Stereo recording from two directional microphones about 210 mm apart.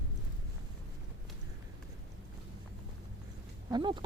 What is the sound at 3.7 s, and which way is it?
Speech, 20° right (ahead or behind).